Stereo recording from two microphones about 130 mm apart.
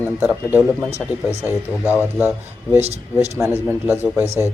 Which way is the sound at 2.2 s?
15° right (ahead or behind).